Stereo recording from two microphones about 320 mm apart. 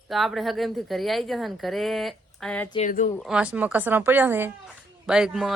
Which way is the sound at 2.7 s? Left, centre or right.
Left.